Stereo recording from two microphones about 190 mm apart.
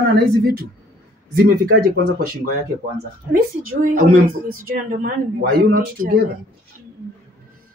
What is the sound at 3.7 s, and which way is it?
Speech, 45° right (ahead or behind).